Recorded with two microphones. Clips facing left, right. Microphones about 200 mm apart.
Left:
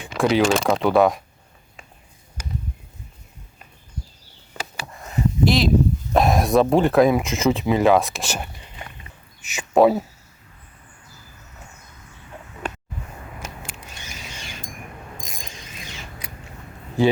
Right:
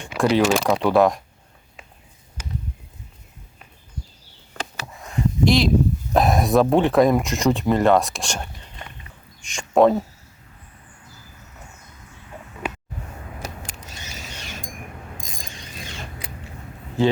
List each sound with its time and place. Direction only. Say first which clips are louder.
0.1 s speech: even; centre (ahead or behind)
4.5 s a sound: right 1 dB; centre (ahead or behind)
6.1 s speech: even; centre (ahead or behind)
13.7 s mechanisms: even; 40° right (ahead or behind)